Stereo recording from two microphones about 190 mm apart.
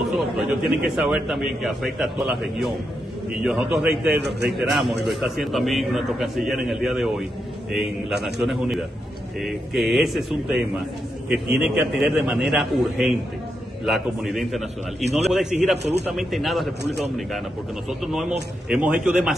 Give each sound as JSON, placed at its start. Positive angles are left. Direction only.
{"t": 0.0, "sound": "a man's voice", "side_deg": 0}
{"t": 4.3, "sound": "a man's voice", "side_deg": -65}
{"t": 4.6, "sound": "a man's voice", "side_deg": 0}
{"t": 15.0, "sound": "a man's voice", "side_deg": -35}
{"t": 15.3, "sound": "a man's voice", "side_deg": -5}
{"t": 17.8, "sound": "a man's voice", "side_deg": 0}